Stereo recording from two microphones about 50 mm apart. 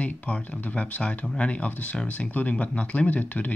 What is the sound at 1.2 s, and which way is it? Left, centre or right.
Speech, left.